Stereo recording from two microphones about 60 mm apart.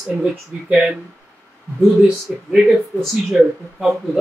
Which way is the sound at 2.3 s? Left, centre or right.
Centre.